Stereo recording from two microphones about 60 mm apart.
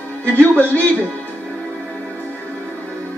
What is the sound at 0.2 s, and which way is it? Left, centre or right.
Speech, left.